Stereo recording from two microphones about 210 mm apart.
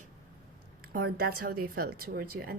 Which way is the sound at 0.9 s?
45° right (ahead or behind).